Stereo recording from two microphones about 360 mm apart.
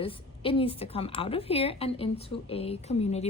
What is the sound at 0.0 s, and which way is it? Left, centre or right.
A woman's voice, centre.